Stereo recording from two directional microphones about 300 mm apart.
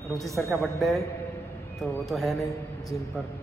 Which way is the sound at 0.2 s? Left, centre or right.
Centre.